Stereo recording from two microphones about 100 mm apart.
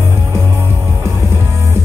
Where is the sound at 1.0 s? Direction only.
25° right (ahead or behind).